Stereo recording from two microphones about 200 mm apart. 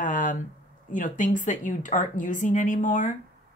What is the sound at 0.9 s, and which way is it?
Speech, 40° left (ahead or behind).